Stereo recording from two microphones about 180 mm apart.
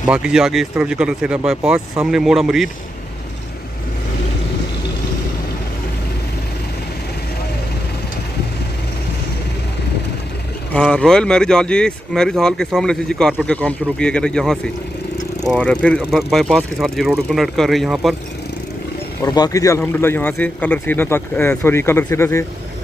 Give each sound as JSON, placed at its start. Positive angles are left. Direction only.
{"t": 0.0, "sound": "speech", "side_deg": -5}
{"t": 10.8, "sound": "speech", "side_deg": 5}
{"t": 19.2, "sound": "a man's voice", "side_deg": 20}